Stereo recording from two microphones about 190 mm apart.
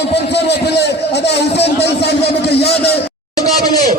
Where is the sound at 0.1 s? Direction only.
60° left (ahead or behind).